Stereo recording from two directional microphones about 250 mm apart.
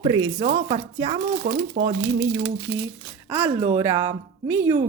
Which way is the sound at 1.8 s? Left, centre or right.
Right.